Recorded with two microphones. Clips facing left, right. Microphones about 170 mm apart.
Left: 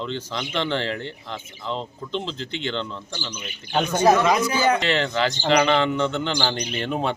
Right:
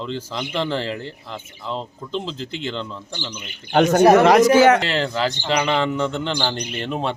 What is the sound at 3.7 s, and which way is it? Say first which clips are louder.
Speech: right 6 dB; 65° right (ahead or behind).